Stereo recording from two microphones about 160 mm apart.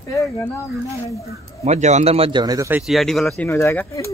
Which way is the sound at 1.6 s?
45° right (ahead or behind).